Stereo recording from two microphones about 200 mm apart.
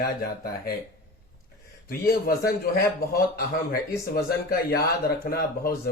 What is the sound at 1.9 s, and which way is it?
Speech, 50° left (ahead or behind).